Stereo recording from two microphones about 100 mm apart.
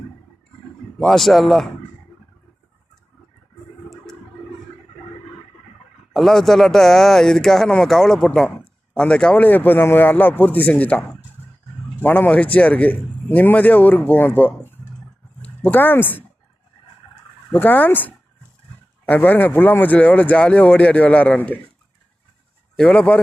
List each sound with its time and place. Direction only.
0.9 s speech: 5° left (ahead or behind)
6.1 s speech: centre (ahead or behind)
12.0 s speech: 20° left (ahead or behind)
17.5 s speech: 15° left (ahead or behind)
22.8 s speech: 15° left (ahead or behind)